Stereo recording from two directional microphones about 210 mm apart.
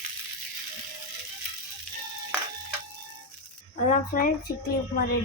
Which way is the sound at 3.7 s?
35° left (ahead or behind).